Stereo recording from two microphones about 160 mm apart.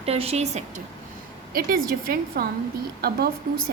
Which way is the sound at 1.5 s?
65° right (ahead or behind).